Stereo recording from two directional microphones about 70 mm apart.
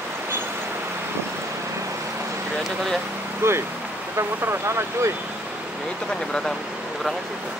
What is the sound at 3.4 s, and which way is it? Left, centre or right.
Speech, right.